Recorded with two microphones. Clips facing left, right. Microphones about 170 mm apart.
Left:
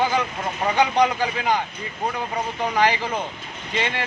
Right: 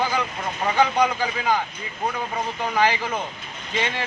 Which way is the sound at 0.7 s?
20° left (ahead or behind).